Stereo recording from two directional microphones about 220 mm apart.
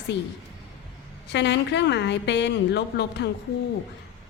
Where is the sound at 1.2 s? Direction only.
50° left (ahead or behind).